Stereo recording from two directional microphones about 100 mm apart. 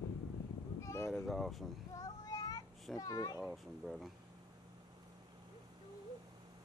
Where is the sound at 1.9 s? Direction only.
35° left (ahead or behind).